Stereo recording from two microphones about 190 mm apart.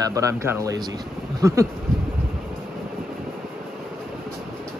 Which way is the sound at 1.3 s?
15° right (ahead or behind).